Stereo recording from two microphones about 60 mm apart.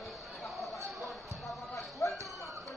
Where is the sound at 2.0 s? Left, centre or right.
Left.